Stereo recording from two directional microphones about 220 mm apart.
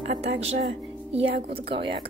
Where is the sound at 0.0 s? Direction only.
30° right (ahead or behind).